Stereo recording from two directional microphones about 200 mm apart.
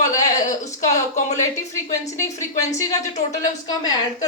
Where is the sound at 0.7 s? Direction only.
35° left (ahead or behind).